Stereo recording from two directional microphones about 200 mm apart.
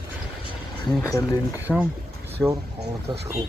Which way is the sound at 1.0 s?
15° left (ahead or behind).